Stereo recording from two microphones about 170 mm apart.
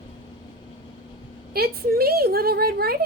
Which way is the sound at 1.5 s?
65° right (ahead or behind).